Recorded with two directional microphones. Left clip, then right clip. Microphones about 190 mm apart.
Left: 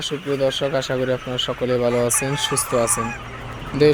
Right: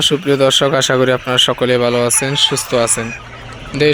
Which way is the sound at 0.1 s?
30° right (ahead or behind).